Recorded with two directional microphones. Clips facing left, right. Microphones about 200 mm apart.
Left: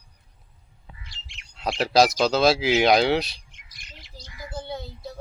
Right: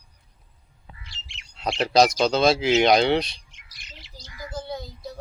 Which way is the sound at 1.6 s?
5° left (ahead or behind).